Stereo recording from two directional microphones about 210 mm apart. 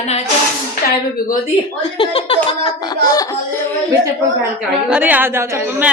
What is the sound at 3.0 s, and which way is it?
Laughter, 15° left (ahead or behind).